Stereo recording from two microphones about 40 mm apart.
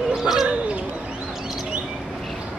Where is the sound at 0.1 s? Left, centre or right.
Centre.